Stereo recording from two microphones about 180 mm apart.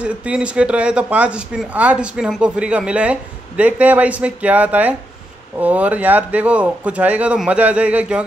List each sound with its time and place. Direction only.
0.0 s speech: 5° right (ahead or behind)